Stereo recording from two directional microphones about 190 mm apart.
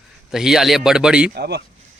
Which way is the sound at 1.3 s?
60° right (ahead or behind).